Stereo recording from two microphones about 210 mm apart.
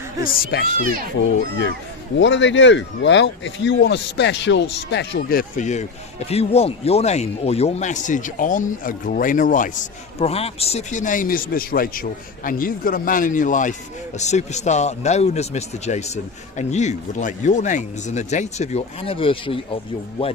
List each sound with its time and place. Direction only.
0.5 s speech: 50° left (ahead or behind)
1.4 s a child's voice: 60° left (ahead or behind); by 20.3 s 25° left (ahead or behind)